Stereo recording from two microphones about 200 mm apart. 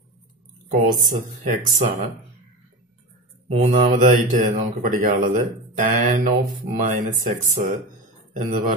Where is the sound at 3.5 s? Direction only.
40° right (ahead or behind).